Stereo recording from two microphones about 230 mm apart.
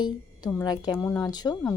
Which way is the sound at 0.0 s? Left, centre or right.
Centre.